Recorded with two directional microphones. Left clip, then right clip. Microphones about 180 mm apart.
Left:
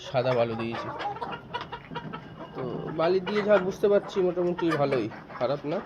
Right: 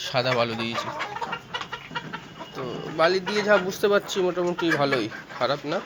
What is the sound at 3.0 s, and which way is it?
Speech, centre (ahead or behind).